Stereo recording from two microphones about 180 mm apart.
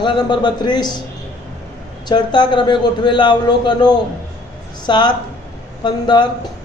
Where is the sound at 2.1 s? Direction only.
25° left (ahead or behind).